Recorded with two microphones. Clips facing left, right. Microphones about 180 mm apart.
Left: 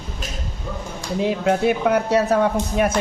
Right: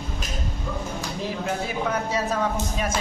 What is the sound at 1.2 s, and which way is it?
Speech, 65° left (ahead or behind).